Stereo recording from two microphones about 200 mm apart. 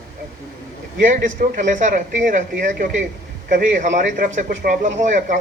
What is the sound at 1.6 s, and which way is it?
A man's voice, 40° right (ahead or behind).